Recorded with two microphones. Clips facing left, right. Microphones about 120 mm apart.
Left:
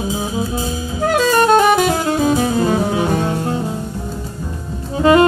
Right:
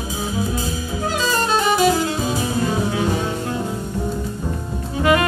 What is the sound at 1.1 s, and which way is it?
Music, 55° left (ahead or behind).